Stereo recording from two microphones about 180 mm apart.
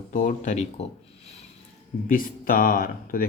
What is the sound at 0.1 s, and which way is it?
Speech, 45° left (ahead or behind).